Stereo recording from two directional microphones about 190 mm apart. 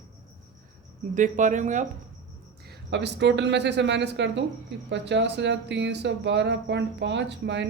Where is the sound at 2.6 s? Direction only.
65° right (ahead or behind).